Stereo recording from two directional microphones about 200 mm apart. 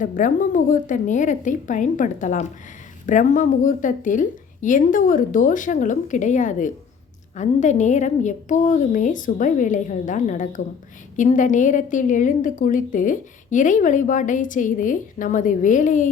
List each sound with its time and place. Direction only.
0.0 s a woman's voice: 40° left (ahead or behind)